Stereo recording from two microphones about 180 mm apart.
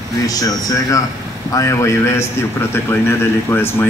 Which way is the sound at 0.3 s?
20° left (ahead or behind).